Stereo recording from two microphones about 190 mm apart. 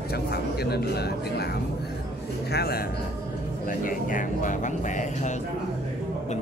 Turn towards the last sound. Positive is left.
turn(degrees=40)  # may be behind; listen again after turning